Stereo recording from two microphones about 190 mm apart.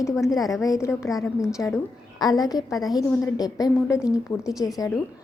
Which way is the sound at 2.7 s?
Centre (ahead or behind).